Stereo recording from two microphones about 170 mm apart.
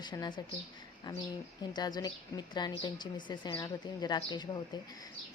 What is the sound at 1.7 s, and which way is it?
A woman's voice, 25° left (ahead or behind).